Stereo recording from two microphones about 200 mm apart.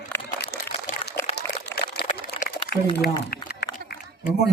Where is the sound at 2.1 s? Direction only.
45° left (ahead or behind).